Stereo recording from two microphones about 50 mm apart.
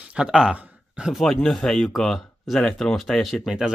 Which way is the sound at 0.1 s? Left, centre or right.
Centre.